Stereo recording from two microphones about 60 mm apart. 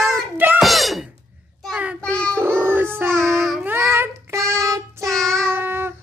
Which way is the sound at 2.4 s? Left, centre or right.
Right.